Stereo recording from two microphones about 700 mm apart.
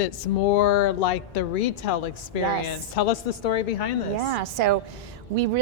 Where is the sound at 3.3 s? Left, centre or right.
Left.